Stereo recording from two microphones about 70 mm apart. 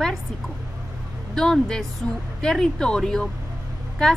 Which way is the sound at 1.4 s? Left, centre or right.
Centre.